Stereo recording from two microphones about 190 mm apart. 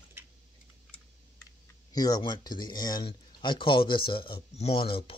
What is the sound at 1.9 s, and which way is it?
Speech, 20° left (ahead or behind).